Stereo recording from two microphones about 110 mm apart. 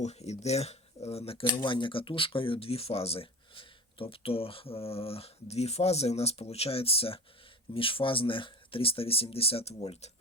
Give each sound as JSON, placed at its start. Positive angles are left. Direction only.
{"t": 0.0, "sound": "speech", "side_deg": 80}
{"t": 1.5, "sound": "speech", "side_deg": 45}